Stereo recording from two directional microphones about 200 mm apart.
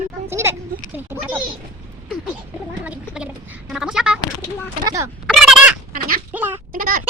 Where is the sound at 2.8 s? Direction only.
5° right (ahead or behind).